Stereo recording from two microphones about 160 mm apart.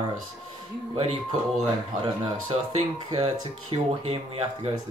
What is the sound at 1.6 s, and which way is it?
Speech, 30° right (ahead or behind).